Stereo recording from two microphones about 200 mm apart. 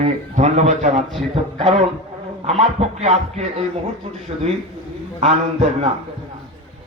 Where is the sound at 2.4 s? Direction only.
30° right (ahead or behind).